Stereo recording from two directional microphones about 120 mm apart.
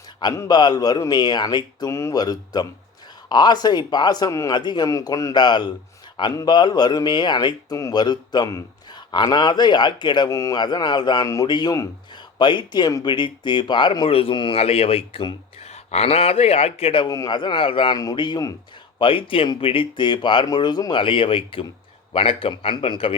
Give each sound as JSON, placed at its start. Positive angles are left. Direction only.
{"t": 0.3, "sound": "speech", "side_deg": 35}
{"t": 10.2, "sound": "a man's voice", "side_deg": 25}
{"t": 10.6, "sound": "a man's voice", "side_deg": 40}
{"t": 15.7, "sound": "a man's voice", "side_deg": 60}
{"t": 17.1, "sound": "speech", "side_deg": 35}
{"t": 17.9, "sound": "speech", "side_deg": 35}
{"t": 18.9, "sound": "speech", "side_deg": 45}